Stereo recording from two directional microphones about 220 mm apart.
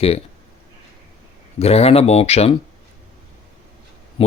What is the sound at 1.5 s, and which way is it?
Speech, 30° left (ahead or behind).